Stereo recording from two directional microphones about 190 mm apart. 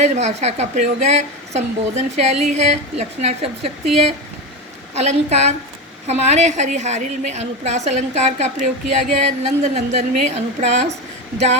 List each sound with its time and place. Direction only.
0.0 s a woman's voice: 35° right (ahead or behind)
4.9 s a woman's voice: 35° right (ahead or behind)